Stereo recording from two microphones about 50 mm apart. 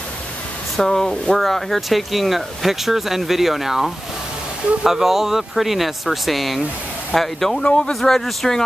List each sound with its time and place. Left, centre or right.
0.7 s speech: centre
7.6 s speech: left
7.9 s speech: centre